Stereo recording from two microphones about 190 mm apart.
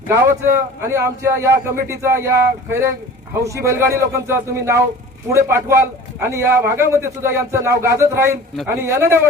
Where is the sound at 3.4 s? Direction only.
15° right (ahead or behind).